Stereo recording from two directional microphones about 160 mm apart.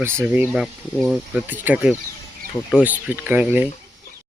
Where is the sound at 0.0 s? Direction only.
10° right (ahead or behind).